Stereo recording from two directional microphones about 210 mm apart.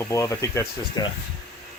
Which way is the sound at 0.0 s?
15° left (ahead or behind).